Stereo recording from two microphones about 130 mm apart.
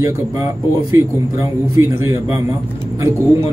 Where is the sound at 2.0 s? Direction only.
30° right (ahead or behind).